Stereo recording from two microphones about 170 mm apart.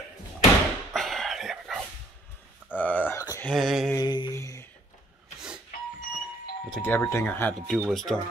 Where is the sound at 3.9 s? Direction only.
25° left (ahead or behind).